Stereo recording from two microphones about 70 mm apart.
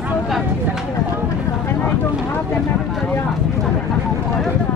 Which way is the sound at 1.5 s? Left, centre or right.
Left.